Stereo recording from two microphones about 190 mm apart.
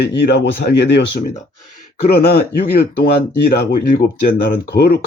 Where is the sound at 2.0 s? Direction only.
55° left (ahead or behind).